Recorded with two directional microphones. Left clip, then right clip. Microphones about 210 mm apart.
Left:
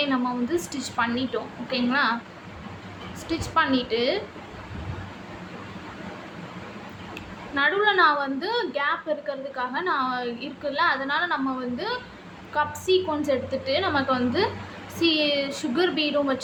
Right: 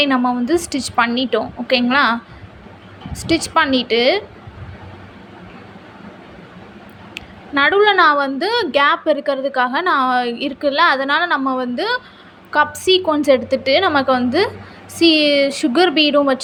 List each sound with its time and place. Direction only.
0.0 s a woman's voice: 35° right (ahead or behind)
3.2 s a woman's voice: 35° right (ahead or behind)
7.1 s a woman's voice: 35° right (ahead or behind)